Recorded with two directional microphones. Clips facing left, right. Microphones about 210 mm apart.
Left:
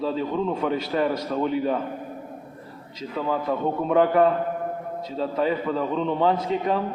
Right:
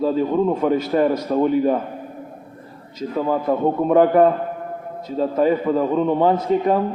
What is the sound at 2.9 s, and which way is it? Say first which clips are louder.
A man's voice: right 5 dB; 45° right (ahead or behind).